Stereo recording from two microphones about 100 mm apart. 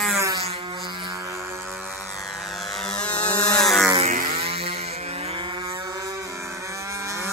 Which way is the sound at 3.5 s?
5° left (ahead or behind).